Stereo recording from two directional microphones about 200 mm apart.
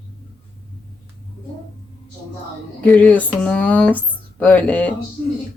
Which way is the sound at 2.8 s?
5° left (ahead or behind).